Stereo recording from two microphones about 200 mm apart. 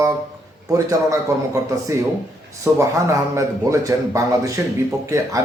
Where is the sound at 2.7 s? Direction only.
15° right (ahead or behind).